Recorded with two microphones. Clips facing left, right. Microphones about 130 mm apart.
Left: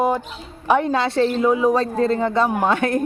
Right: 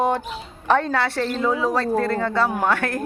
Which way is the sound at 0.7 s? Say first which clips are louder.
Left 2 dB; 15° left (ahead or behind).